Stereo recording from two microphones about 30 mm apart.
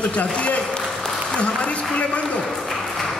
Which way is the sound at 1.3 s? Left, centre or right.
Left.